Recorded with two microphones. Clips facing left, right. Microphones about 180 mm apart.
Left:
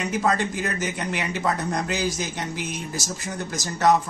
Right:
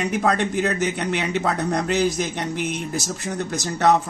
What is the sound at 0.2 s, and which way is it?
A man's voice, 65° right (ahead or behind).